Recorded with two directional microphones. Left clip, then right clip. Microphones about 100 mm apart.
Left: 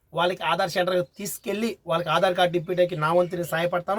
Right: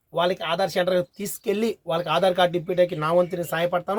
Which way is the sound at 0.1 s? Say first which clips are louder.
Even; 15° right (ahead or behind).